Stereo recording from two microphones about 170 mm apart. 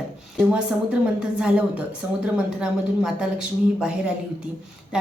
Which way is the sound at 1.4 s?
5° right (ahead or behind).